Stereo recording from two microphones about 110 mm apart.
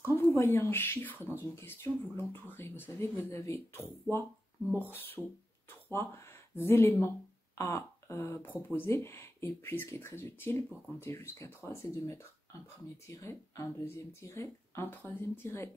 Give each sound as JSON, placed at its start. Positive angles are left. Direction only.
{"t": 0.0, "sound": "speech", "side_deg": 20}